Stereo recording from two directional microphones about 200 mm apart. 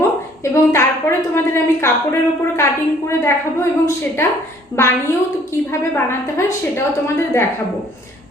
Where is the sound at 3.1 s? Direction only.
15° left (ahead or behind).